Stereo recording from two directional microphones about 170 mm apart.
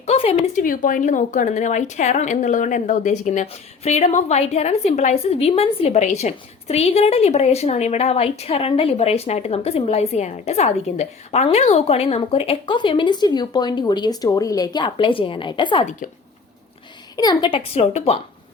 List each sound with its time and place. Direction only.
0.0 s speech: 35° left (ahead or behind)
17.2 s speech: 25° left (ahead or behind)